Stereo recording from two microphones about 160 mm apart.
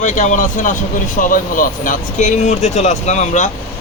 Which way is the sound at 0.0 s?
50° left (ahead or behind).